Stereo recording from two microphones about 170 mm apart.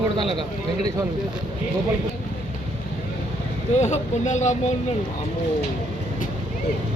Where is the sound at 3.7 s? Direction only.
45° left (ahead or behind).